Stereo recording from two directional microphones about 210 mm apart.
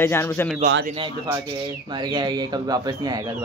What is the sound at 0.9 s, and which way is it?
Speech, 20° right (ahead or behind).